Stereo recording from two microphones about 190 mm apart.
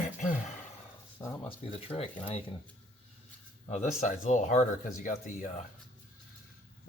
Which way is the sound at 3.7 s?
40° left (ahead or behind).